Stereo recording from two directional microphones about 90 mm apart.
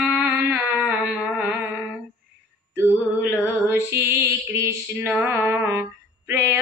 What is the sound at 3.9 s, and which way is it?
Female singing, 25° right (ahead or behind).